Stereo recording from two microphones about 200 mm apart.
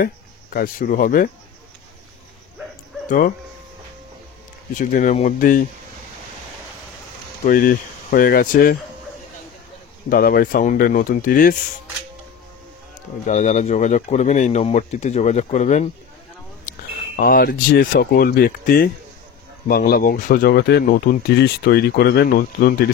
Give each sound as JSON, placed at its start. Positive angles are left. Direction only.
{"t": 0.0, "sound": "speech", "side_deg": 45}
{"t": 3.1, "sound": "speech", "side_deg": 45}
{"t": 4.7, "sound": "speech", "side_deg": 40}
{"t": 7.4, "sound": "speech", "side_deg": 45}
{"t": 10.0, "sound": "speech", "side_deg": 45}
{"t": 13.3, "sound": "speech", "side_deg": 35}
{"t": 16.7, "sound": "a sound", "side_deg": 40}
{"t": 17.2, "sound": "speech", "side_deg": 50}